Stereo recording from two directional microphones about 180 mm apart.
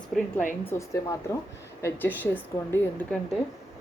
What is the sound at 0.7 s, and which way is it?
Speech, 15° left (ahead or behind).